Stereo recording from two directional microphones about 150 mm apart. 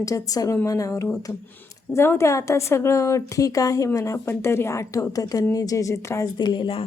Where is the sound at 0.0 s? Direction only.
25° left (ahead or behind).